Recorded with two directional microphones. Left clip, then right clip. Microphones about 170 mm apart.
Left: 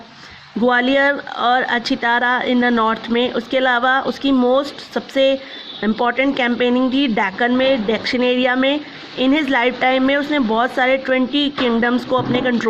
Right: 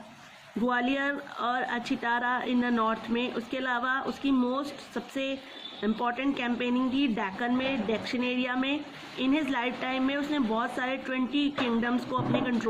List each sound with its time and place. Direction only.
0.7 s speech: 45° left (ahead or behind)